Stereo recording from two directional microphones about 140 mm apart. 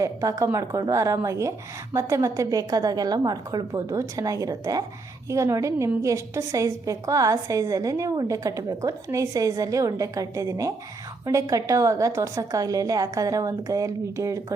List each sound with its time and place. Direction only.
0.0 s a woman's voice: 25° right (ahead or behind)